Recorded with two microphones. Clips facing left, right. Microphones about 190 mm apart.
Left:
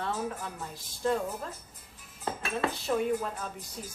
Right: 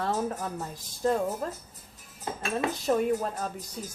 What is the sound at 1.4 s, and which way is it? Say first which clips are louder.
Speech: right 6 dB; 45° right (ahead or behind).